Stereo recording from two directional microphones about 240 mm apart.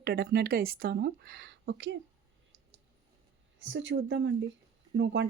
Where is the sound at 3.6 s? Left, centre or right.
Right.